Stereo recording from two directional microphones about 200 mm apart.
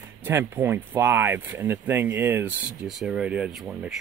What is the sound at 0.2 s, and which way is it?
Speech, 10° right (ahead or behind).